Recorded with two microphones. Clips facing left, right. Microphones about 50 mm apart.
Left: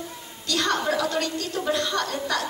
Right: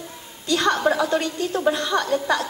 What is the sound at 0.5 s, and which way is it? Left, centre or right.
A woman's voice, right.